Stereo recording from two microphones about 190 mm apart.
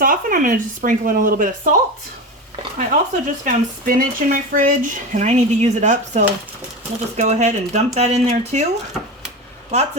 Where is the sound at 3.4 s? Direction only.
45° right (ahead or behind).